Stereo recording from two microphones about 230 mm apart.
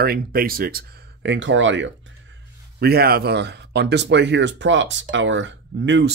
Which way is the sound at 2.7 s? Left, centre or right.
Right.